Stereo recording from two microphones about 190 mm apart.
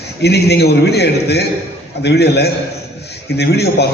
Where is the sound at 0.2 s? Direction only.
60° left (ahead or behind).